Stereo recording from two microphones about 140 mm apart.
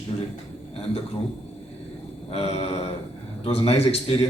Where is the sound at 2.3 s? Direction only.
45° left (ahead or behind).